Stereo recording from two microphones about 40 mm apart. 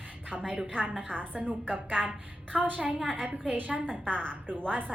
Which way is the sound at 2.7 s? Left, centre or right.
Right.